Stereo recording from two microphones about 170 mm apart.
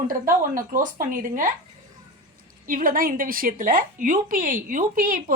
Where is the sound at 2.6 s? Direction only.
55° right (ahead or behind).